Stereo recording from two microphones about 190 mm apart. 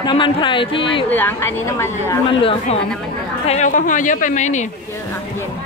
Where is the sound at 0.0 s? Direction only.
25° left (ahead or behind).